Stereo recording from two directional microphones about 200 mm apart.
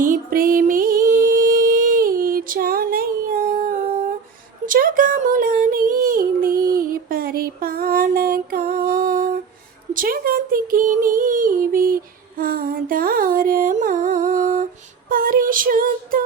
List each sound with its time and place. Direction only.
0.0 s music: 45° right (ahead or behind)
4.6 s a sound: 45° right (ahead or behind)
12.4 s music: 45° right (ahead or behind)
15.1 s female singing: 45° right (ahead or behind)